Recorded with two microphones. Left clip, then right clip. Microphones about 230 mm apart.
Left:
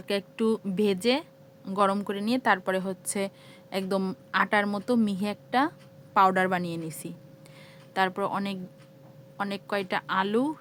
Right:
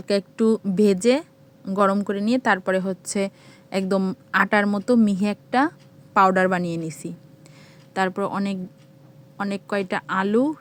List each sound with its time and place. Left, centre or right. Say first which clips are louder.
0.0 s a woman's voice: right 7 dB; centre